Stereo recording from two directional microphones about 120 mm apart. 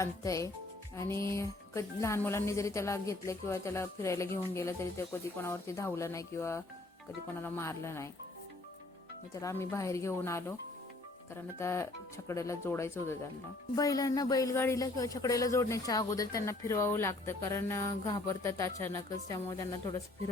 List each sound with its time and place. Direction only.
0.0 s speech: 30° left (ahead or behind)
9.3 s speech: 25° left (ahead or behind)
11.6 s speech: 25° left (ahead or behind)